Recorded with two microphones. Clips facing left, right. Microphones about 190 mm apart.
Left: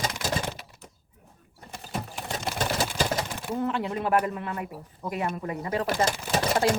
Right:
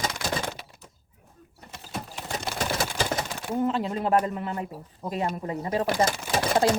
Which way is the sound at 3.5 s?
25° right (ahead or behind).